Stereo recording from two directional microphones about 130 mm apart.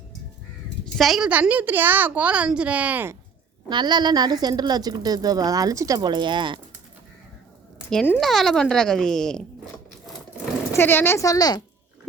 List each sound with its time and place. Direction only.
0.9 s a woman's voice: centre (ahead or behind)
3.7 s a woman's voice: 35° right (ahead or behind)
8.2 s speech: centre (ahead or behind)
10.7 s speech: 15° left (ahead or behind)